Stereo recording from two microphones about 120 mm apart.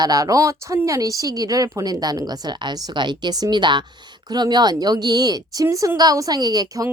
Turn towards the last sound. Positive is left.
turn(degrees=-30)  # may be behind; listen again after turning